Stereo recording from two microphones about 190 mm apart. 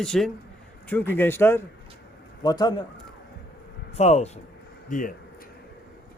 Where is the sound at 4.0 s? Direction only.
35° left (ahead or behind).